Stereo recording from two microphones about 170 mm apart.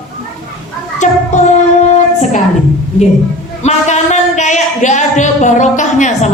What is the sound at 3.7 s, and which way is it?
A woman's voice, 40° left (ahead or behind).